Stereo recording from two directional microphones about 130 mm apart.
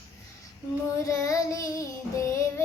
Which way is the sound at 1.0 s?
25° left (ahead or behind).